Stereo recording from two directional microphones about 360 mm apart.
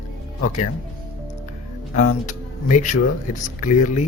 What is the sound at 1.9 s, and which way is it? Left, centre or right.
Speech, left.